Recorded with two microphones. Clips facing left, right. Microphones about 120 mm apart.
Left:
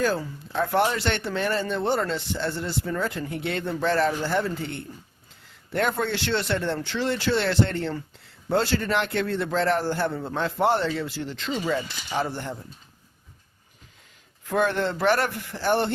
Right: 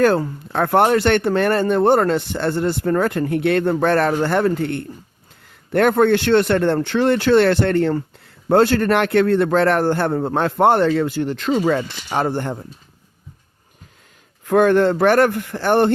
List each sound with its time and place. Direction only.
0.0 s a man's voice: 60° right (ahead or behind)
14.4 s speech: 55° right (ahead or behind)